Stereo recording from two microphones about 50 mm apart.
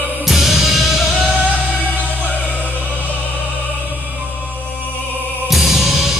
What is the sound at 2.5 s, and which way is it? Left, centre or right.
Music, left.